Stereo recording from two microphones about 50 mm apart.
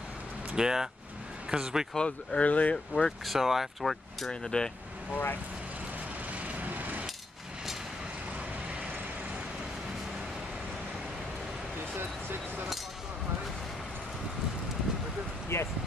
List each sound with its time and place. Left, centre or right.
0.6 s speech: centre
2.0 s speech: left
3.3 s speech: centre
4.3 s speech: centre
5.1 s speech: left
6.4 s vehicle: right
15.5 s a sound: left